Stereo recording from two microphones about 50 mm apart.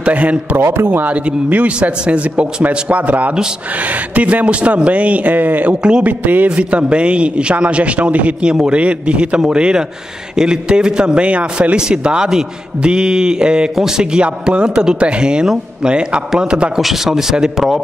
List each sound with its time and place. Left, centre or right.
0.0 s a man's voice: right
5.8 s a man's voice: centre
6.0 s a man's voice: right
16.7 s speech: centre